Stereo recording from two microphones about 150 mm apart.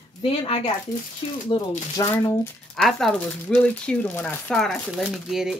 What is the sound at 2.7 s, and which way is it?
Speech, centre (ahead or behind).